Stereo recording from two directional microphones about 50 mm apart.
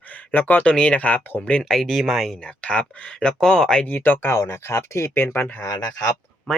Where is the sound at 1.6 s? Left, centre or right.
Centre.